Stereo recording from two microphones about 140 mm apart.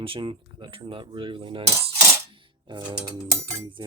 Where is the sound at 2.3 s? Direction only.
35° right (ahead or behind).